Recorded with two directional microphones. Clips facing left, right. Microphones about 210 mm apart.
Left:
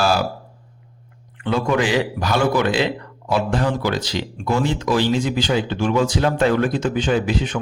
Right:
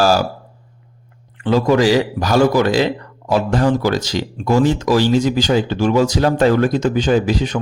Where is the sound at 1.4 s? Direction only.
35° right (ahead or behind).